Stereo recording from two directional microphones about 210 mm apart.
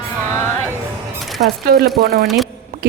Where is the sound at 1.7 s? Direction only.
45° right (ahead or behind).